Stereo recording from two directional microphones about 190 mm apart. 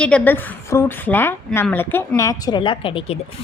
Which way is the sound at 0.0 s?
10° left (ahead or behind).